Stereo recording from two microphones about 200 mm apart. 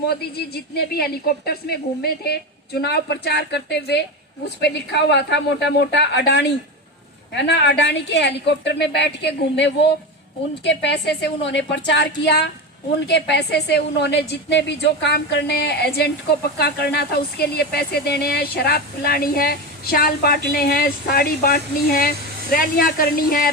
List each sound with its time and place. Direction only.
0.1 s a woman's voice: 50° left (ahead or behind)